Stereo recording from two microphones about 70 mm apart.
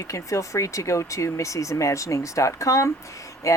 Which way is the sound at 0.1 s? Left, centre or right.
Left.